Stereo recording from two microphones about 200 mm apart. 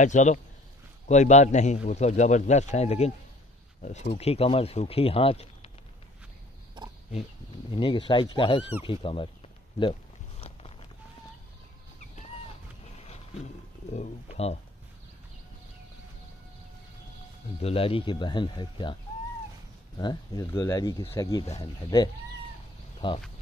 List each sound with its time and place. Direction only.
0.0 s speech: 35° left (ahead or behind)
7.7 s speech: 25° left (ahead or behind)
12.9 s a sound: 30° left (ahead or behind)
13.9 s speech: 30° left (ahead or behind)
17.6 s speech: 30° left (ahead or behind)
20.0 s speech: 20° left (ahead or behind)
22.9 s speech: 25° left (ahead or behind)